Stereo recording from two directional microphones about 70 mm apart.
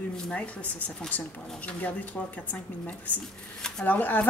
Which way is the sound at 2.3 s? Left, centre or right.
Left.